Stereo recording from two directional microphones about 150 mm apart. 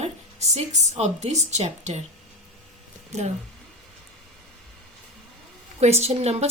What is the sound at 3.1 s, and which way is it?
Speech, 50° right (ahead or behind).